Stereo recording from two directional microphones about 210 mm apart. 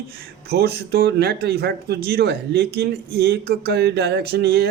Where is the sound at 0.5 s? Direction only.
50° right (ahead or behind).